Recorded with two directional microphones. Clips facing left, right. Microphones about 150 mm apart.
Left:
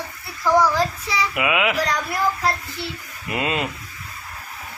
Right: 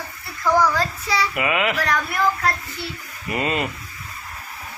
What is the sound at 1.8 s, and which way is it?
Speech, 15° left (ahead or behind).